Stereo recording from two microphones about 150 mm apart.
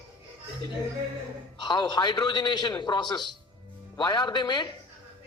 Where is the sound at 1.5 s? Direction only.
30° left (ahead or behind).